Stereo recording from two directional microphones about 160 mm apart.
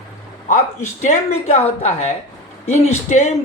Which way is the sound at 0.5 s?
45° left (ahead or behind).